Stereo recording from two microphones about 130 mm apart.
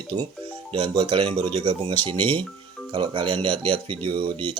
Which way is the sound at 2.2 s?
15° left (ahead or behind).